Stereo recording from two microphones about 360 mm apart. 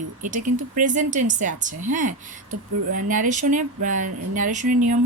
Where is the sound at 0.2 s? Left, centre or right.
Right.